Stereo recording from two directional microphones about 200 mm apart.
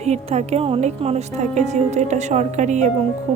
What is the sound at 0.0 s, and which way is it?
Speech, 35° right (ahead or behind).